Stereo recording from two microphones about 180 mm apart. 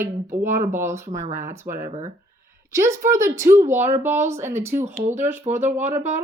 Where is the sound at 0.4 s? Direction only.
15° right (ahead or behind).